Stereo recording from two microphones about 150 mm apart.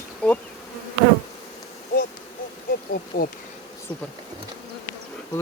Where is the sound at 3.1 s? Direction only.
70° left (ahead or behind).